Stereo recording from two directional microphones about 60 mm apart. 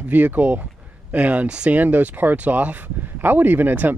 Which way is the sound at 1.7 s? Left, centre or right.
Right.